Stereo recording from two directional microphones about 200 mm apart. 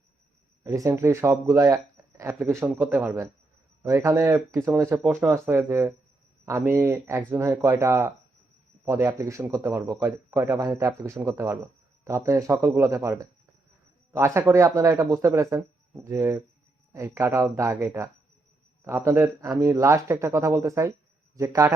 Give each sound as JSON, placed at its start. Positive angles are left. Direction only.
{"t": 0.6, "sound": "a man's voice", "side_deg": -15}